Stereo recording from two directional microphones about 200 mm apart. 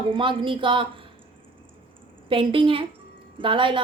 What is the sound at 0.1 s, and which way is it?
Speech, 25° right (ahead or behind).